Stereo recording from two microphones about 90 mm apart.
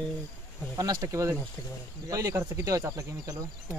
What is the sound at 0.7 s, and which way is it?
Speech, 45° right (ahead or behind).